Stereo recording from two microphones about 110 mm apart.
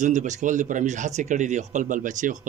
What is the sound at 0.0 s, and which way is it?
Speech, 90° right.